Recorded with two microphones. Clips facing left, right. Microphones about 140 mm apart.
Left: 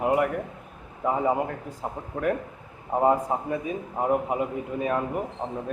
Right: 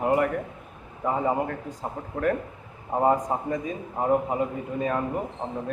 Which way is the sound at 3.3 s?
10° left (ahead or behind).